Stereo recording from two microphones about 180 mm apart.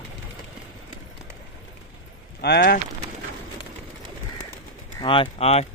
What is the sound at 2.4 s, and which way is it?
Speech, 60° left (ahead or behind).